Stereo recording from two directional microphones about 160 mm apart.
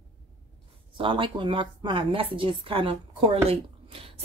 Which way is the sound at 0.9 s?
30° right (ahead or behind).